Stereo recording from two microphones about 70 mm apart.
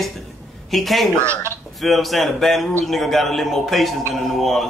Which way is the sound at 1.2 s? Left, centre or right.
Right.